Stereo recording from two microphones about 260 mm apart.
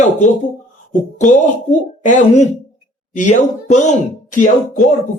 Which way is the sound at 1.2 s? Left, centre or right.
Left.